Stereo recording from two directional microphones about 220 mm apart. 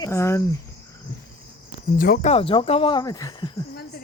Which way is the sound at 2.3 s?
25° left (ahead or behind).